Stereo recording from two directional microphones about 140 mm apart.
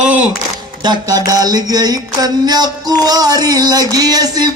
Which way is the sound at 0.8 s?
30° right (ahead or behind).